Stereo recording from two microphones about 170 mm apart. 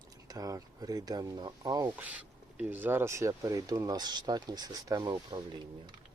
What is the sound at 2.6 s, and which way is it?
Speech, 10° right (ahead or behind).